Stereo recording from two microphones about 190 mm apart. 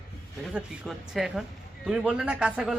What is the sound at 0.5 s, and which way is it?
A man's voice, centre (ahead or behind).